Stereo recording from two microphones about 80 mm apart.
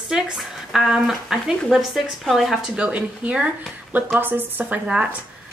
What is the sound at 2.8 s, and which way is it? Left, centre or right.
A woman's voice, centre.